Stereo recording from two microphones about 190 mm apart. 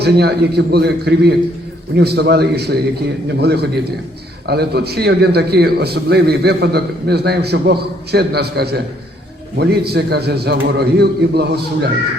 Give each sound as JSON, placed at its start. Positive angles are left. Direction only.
{"t": 0.0, "sound": "a man's voice", "side_deg": -60}